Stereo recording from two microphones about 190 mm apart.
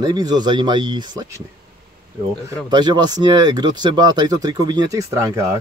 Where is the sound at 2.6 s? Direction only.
20° right (ahead or behind).